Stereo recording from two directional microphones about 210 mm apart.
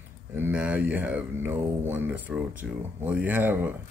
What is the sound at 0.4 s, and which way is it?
Speech, 5° right (ahead or behind).